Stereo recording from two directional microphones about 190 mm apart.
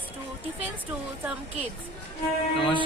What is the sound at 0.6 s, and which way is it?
Music, 10° right (ahead or behind).